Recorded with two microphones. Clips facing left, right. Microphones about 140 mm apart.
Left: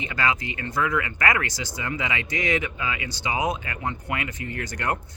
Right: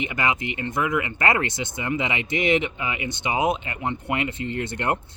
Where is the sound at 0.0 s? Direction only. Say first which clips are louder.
Right 1 dB; 20° right (ahead or behind).